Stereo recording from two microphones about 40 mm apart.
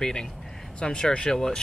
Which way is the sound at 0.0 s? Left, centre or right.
Centre.